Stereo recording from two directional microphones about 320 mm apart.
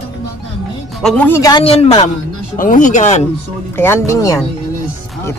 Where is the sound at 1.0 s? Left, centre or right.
Centre; by 3.3 s left.